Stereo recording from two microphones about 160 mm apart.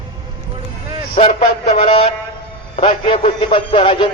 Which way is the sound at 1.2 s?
40° left (ahead or behind).